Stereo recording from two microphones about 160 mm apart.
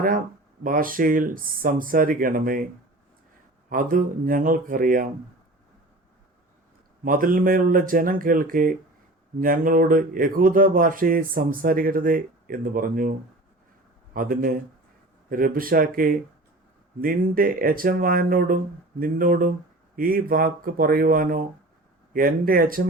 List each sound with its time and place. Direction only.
0.6 s speech: 60° right (ahead or behind)
3.7 s speech: 60° right (ahead or behind)
7.0 s speech: 60° right (ahead or behind)